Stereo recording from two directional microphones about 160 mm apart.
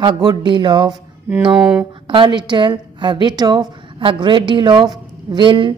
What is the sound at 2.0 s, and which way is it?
A woman's voice, 30° right (ahead or behind).